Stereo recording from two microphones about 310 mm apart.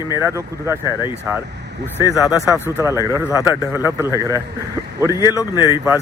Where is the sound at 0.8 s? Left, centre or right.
Centre.